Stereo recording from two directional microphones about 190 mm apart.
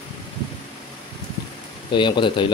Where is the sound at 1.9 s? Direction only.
25° left (ahead or behind).